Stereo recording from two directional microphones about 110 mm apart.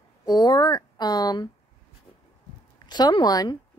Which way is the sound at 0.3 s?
40° left (ahead or behind).